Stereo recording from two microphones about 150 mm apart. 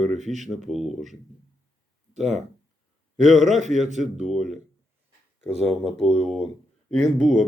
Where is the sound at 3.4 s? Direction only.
50° right (ahead or behind).